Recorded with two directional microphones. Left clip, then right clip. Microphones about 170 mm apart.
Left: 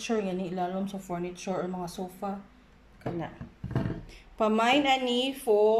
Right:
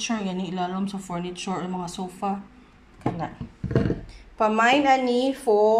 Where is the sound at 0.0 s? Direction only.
15° left (ahead or behind).